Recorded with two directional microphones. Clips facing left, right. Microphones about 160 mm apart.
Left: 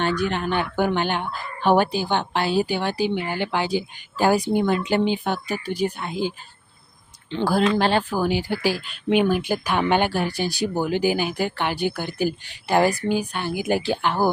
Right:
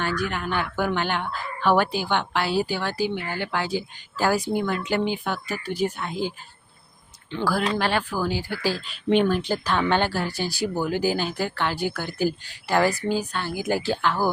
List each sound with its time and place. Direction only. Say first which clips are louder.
0.0 s speech: left 4 dB; 25° left (ahead or behind)
8.8 s speech: right 3 dB; 5° left (ahead or behind); by 14.3 s 20° left (ahead or behind)